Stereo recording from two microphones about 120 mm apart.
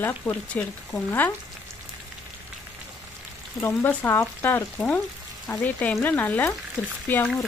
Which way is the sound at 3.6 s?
20° left (ahead or behind).